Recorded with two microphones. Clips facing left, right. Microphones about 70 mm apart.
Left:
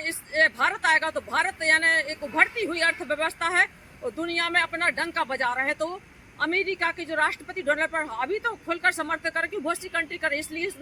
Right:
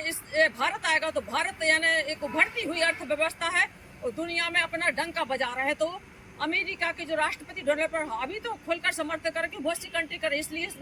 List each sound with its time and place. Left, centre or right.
0.0 s a woman's voice: left